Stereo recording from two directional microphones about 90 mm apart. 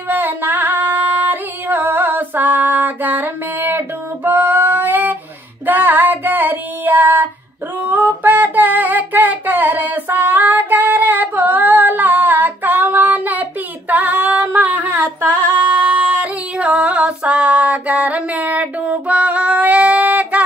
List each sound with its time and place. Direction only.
0.1 s music: 20° right (ahead or behind)
5.7 s child singing: 20° right (ahead or behind)
7.8 s female singing: 20° right (ahead or behind)